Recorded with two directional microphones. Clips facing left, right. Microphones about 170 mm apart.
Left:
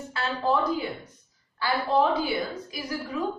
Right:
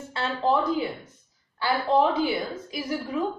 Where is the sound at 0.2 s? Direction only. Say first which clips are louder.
Right 2 dB; 30° right (ahead or behind).